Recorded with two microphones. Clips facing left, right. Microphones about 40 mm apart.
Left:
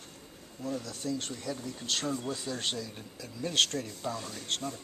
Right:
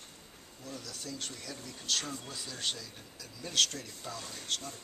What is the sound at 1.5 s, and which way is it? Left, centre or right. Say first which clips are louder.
Speech: left 2 dB; centre.